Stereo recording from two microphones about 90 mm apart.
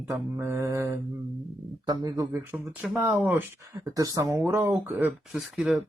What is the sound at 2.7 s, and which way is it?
Speech, 5° right (ahead or behind).